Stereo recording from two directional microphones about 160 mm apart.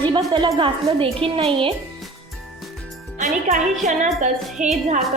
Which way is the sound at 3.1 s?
50° right (ahead or behind).